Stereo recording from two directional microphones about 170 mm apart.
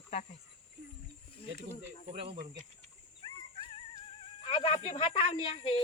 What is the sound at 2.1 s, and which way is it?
Speech, 35° right (ahead or behind).